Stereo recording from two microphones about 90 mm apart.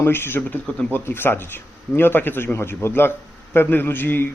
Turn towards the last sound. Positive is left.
turn(degrees=25)  # may be behind; listen again after turning